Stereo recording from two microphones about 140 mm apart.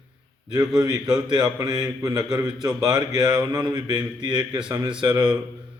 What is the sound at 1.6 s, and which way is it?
Speech, 25° right (ahead or behind).